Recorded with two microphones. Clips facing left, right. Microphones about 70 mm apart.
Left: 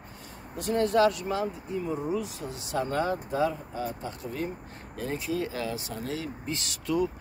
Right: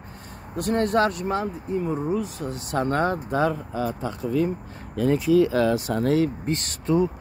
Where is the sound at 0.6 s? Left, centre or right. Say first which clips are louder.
Right 2 dB; right.